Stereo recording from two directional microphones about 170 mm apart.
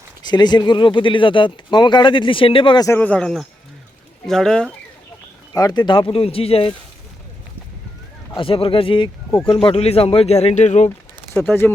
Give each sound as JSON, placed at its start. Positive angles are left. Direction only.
{"t": 0.3, "sound": "speech", "side_deg": 25}
{"t": 3.0, "sound": "speech", "side_deg": 5}
{"t": 5.5, "sound": "speech", "side_deg": 25}
{"t": 8.4, "sound": "speech", "side_deg": 35}
{"t": 11.3, "sound": "speech", "side_deg": 10}